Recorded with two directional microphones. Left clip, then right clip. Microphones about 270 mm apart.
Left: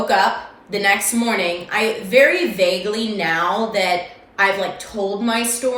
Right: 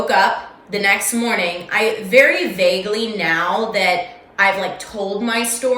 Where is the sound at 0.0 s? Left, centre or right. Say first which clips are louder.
Right 1 dB; centre.